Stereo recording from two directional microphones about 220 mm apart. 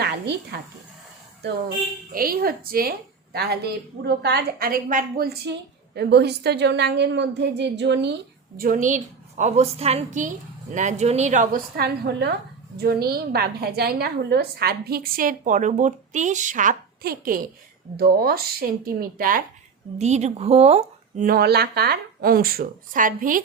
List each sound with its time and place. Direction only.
0.0 s a woman's voice: 45° right (ahead or behind)
2.1 s a woman's voice: 40° right (ahead or behind)
8.5 s a woman's voice: 40° right (ahead or behind)
21.2 s a woman's voice: 45° right (ahead or behind)